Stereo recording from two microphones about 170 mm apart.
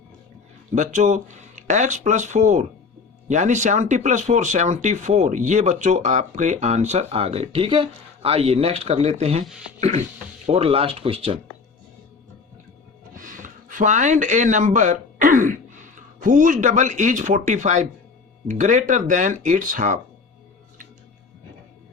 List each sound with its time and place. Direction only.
0.8 s speech: 45° right (ahead or behind)
10.4 s speech: 35° right (ahead or behind)
13.1 s speech: 50° right (ahead or behind)